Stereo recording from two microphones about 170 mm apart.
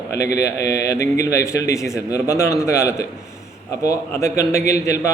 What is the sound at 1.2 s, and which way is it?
A man's voice, 20° left (ahead or behind).